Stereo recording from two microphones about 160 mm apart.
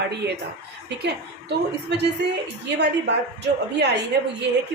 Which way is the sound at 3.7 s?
90° right.